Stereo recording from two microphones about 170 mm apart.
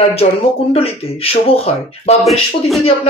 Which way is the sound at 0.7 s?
35° left (ahead or behind).